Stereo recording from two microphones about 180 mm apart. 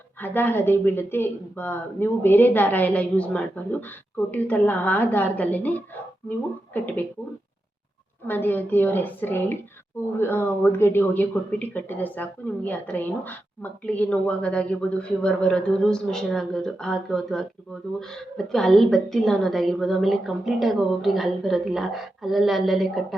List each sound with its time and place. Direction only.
0.2 s speech: 10° left (ahead or behind)
8.3 s a woman's voice: 10° left (ahead or behind)